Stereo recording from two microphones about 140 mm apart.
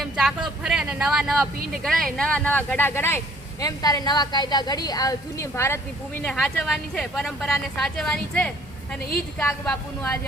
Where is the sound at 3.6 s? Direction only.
25° left (ahead or behind).